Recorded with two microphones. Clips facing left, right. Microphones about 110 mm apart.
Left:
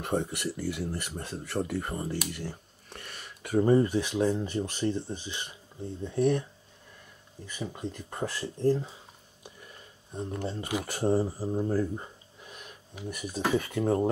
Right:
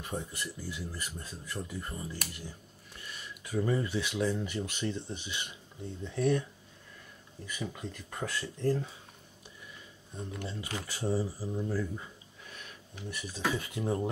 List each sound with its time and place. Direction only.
0.0 s speech: 65° left (ahead or behind)
2.3 s a sound: 65° left (ahead or behind)
3.6 s speech: 40° left (ahead or behind)
6.0 s speech: 20° left (ahead or behind)
7.5 s speech: 25° left (ahead or behind)
9.7 s a sound: 40° left (ahead or behind)
10.9 s speech: 55° left (ahead or behind)
13.1 s speech: 50° left (ahead or behind)